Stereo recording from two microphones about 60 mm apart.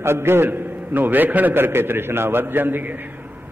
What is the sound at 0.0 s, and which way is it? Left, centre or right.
A man's voice, right.